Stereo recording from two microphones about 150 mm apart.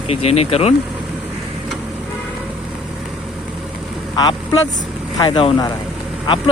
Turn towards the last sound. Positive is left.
turn(degrees=35)  # may be behind; listen again after turning